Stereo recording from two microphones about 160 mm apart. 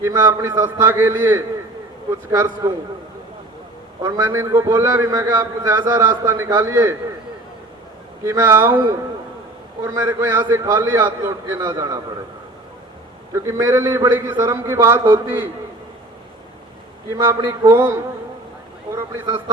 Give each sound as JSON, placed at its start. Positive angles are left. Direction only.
{"t": 0.0, "sound": "a man's voice", "side_deg": -20}
{"t": 4.0, "sound": "a man's voice", "side_deg": -20}
{"t": 8.2, "sound": "a man's voice", "side_deg": -15}
{"t": 9.8, "sound": "a man's voice", "side_deg": -20}
{"t": 13.3, "sound": "a man's voice", "side_deg": -15}
{"t": 17.1, "sound": "a man's voice", "side_deg": -15}
{"t": 18.9, "sound": "a sound", "side_deg": -30}